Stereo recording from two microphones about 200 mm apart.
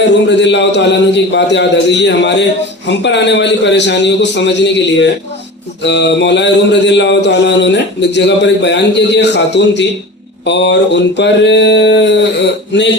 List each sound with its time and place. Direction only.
0.3 s mantra: 60° left (ahead or behind)